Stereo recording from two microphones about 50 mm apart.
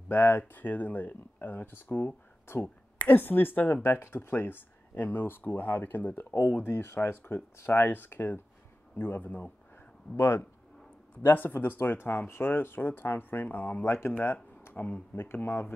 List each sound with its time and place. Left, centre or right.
0.1 s speech: left
2.6 s a sound: left
3.2 s speech: left
3.8 s speech: left
6.6 s speech: left
7.7 s speech: left
10.1 s speech: left
13.8 s speech: left
14.1 s speech: left